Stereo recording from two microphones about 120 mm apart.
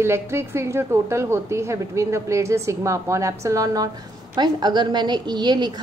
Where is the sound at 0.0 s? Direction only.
20° right (ahead or behind).